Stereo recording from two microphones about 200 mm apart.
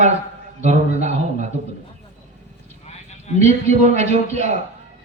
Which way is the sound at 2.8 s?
35° left (ahead or behind).